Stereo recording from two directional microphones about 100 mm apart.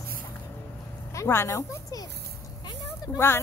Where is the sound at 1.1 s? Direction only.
25° left (ahead or behind).